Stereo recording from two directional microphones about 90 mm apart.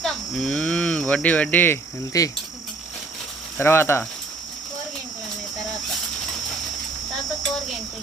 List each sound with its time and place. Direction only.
0.0 s speech: 5° left (ahead or behind); by 1.8 s 20° left (ahead or behind)
2.1 s speech: 40° left (ahead or behind)
3.6 s speech: 25° left (ahead or behind)